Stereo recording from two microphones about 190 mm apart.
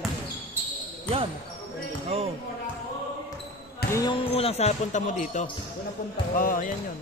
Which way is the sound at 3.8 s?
55° left (ahead or behind).